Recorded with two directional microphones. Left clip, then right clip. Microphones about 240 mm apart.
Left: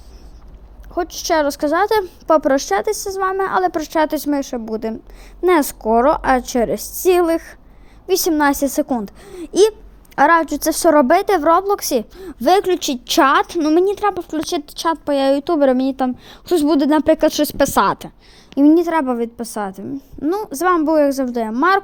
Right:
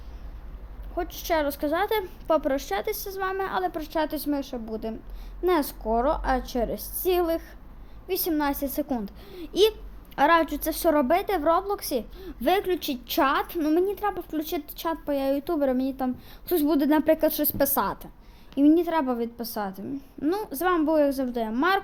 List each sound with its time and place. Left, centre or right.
0.9 s a woman's voice: left